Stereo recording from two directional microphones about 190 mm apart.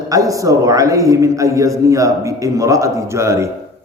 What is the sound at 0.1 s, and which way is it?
A man's voice, 15° right (ahead or behind).